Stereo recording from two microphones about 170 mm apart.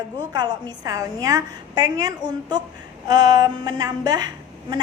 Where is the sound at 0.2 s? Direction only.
25° right (ahead or behind).